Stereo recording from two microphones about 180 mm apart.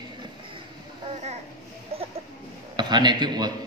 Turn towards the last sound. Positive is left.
turn(degrees=-25)  # may be behind; listen again after turning